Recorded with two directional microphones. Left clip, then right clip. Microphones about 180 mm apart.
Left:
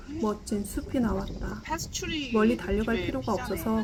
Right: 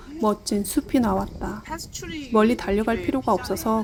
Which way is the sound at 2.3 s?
35° right (ahead or behind).